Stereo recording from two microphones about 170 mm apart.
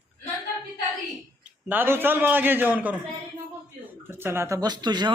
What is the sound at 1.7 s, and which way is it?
A man's voice, 10° right (ahead or behind).